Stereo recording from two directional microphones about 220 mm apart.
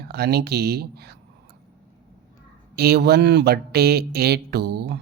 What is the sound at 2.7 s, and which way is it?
Speech, 45° right (ahead or behind).